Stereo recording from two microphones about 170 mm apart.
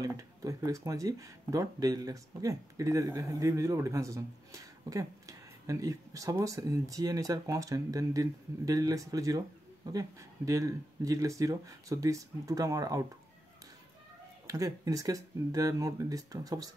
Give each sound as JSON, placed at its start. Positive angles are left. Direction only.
{"t": 0.0, "sound": "speech", "side_deg": -20}
{"t": 14.5, "sound": "speech", "side_deg": -20}